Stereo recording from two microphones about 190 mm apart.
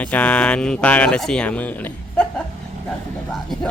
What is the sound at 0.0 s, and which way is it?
Speech, 5° left (ahead or behind).